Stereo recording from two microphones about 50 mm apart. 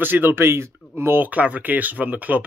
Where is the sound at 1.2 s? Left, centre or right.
Right.